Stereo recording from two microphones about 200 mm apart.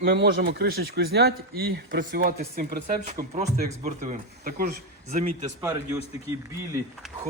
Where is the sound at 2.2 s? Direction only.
45° right (ahead or behind).